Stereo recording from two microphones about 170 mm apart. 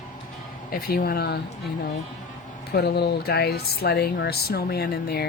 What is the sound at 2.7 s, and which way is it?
Speech, 70° left (ahead or behind).